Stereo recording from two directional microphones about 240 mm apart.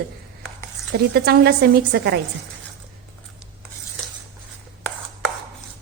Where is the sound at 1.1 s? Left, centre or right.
Right.